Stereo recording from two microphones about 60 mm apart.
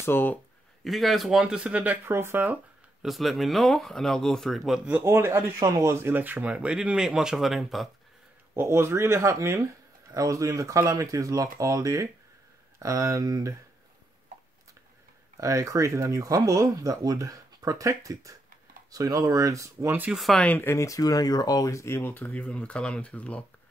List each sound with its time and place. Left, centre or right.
0.0 s speech: left
0.8 s speech: centre
1.5 s speech: centre
2.0 s speech: right
3.0 s speech: centre
4.9 s speech: right
5.6 s speech: right; by 7.9 s centre
8.5 s speech: right
15.3 s speech: right
18.9 s speech: right
20.1 s speech: centre
20.6 s speech: left
21.8 s speech: left
22.1 s speech: left